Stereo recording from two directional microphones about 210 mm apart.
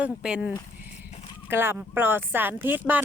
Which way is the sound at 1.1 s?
30° left (ahead or behind).